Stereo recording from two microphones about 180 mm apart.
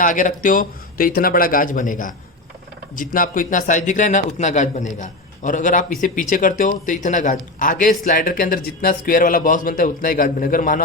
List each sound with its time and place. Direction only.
0.0 s a man's voice: 45° left (ahead or behind)